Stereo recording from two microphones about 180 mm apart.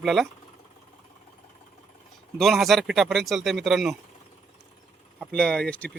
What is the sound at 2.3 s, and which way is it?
Speech, centre (ahead or behind).